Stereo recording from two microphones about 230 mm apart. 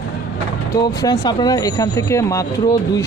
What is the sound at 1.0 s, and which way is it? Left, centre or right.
Speech, centre.